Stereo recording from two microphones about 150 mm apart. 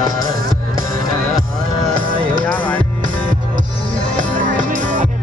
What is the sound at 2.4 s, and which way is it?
Music, 10° left (ahead or behind).